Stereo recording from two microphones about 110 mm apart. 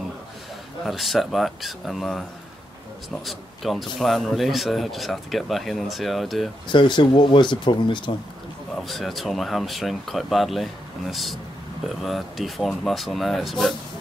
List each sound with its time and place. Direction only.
0.8 s speech: centre (ahead or behind)
3.3 s speech: centre (ahead or behind)
6.7 s speech: 45° left (ahead or behind)
8.7 s speech: centre (ahead or behind)